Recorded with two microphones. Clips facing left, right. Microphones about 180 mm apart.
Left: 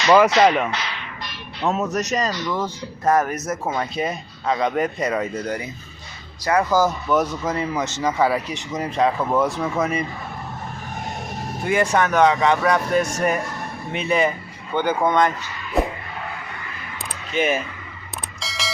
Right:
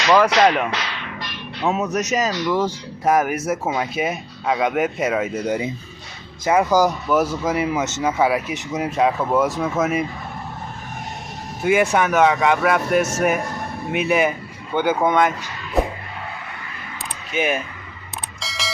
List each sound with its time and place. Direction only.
0.3 s speech: centre (ahead or behind)
5.5 s speech: 20° right (ahead or behind); by 10.1 s 5° right (ahead or behind)
11.6 s speech: 10° right (ahead or behind)
15.8 s music: centre (ahead or behind)
17.3 s speech: 5° right (ahead or behind)
18.3 s alarm clock: centre (ahead or behind)